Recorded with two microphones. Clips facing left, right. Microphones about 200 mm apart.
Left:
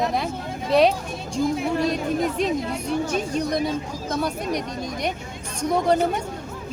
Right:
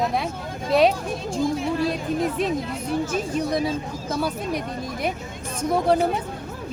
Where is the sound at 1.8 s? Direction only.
Centre (ahead or behind).